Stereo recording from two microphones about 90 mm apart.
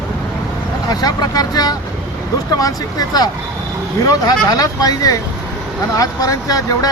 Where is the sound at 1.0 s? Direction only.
45° left (ahead or behind).